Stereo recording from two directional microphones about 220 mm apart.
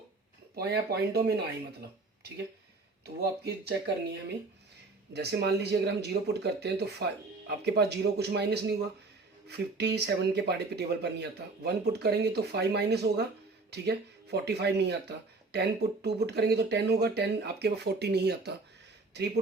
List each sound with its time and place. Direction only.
0.5 s speech: 45° right (ahead or behind)
3.2 s speech: 45° right (ahead or behind)